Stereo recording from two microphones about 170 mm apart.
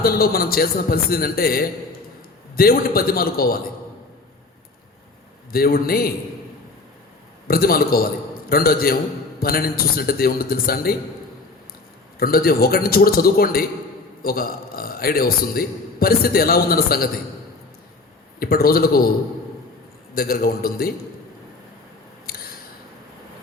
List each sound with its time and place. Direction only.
0.0 s a man's voice: 60° left (ahead or behind)
5.5 s a man's voice: 60° left (ahead or behind)
7.4 s a man's voice: 60° left (ahead or behind)
12.2 s a man's voice: 60° left (ahead or behind)
18.3 s a man's voice: 60° left (ahead or behind)
20.1 s a man's voice: 60° left (ahead or behind)
22.3 s a sound: 60° left (ahead or behind)